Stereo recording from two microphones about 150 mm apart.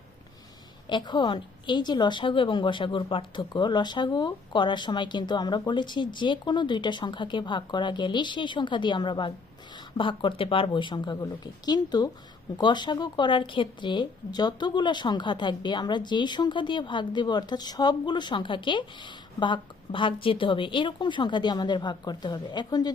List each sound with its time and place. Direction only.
0.9 s a woman's voice: 30° left (ahead or behind)